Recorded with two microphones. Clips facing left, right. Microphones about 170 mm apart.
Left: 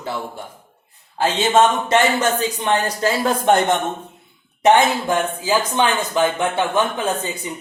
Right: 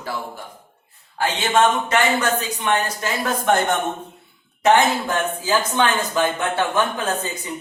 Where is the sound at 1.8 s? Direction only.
25° left (ahead or behind).